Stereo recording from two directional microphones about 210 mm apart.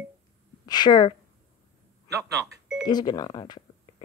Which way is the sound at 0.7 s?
20° left (ahead or behind).